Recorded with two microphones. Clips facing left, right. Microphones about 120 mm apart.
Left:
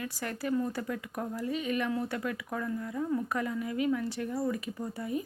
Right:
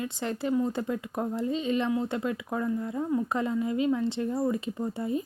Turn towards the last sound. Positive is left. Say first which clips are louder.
# right 4 dB
turn(degrees=-25)  # may be behind; listen again after turning